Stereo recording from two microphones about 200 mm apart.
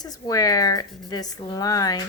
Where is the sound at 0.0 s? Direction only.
20° left (ahead or behind).